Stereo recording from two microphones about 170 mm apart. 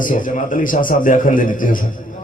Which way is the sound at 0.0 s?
50° left (ahead or behind).